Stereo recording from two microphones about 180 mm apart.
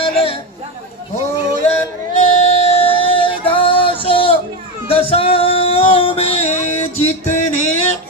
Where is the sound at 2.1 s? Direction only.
35° left (ahead or behind).